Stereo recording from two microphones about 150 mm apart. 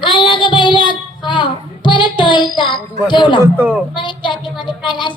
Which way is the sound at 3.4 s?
15° right (ahead or behind).